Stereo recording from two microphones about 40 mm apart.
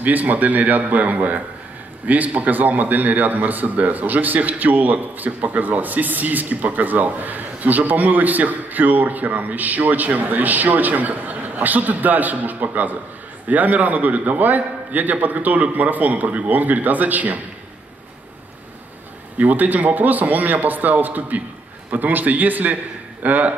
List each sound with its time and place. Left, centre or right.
0.0 s a man's voice: right
19.3 s a man's voice: right